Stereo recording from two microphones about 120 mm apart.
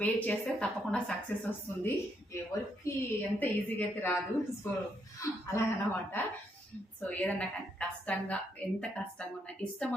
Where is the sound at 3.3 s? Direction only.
15° left (ahead or behind).